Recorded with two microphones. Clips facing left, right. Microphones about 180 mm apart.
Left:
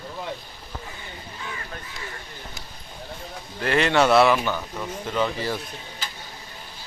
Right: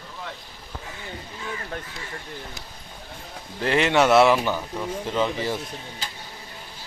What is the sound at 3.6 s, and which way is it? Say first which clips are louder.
Speech: even; 20° right (ahead or behind).